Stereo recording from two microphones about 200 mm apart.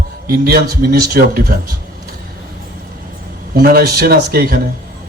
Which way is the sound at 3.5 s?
50° right (ahead or behind).